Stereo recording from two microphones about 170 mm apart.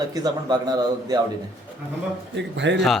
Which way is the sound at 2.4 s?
90° right.